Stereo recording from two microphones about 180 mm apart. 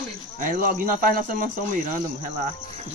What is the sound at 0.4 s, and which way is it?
Speech, 50° right (ahead or behind).